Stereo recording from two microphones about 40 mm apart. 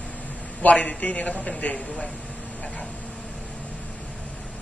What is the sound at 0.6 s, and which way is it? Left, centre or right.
Speech, left.